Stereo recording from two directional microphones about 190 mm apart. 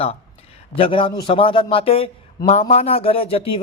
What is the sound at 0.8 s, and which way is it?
Speech, 30° left (ahead or behind).